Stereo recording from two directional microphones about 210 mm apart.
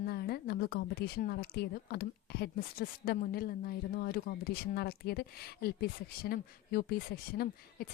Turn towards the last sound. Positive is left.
turn(degrees=45)  # may be behind; listen again after turning